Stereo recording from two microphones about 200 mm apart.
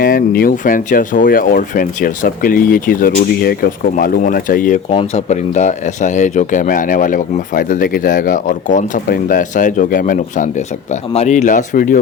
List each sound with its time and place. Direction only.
0.0 s speech: 45° left (ahead or behind)
4.9 s speech: 30° left (ahead or behind)